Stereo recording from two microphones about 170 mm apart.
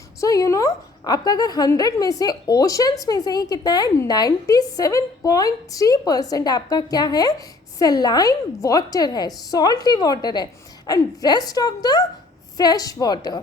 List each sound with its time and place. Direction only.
0.2 s a woman's voice: 20° left (ahead or behind)